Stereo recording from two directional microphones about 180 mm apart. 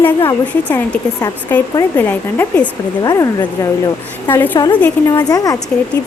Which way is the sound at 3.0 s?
20° left (ahead or behind).